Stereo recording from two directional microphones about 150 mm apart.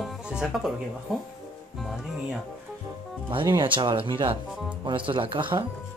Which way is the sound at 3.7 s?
30° right (ahead or behind).